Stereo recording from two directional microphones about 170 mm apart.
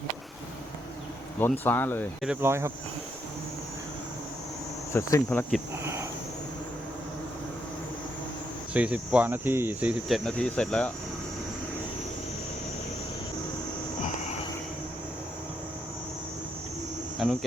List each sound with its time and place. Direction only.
1.4 s speech: 10° left (ahead or behind)
2.2 s speech: 10° right (ahead or behind)
4.9 s speech: 15° left (ahead or behind)
5.8 s speech: 15° right (ahead or behind)
8.7 s speech: 5° right (ahead or behind)
17.2 s speech: centre (ahead or behind)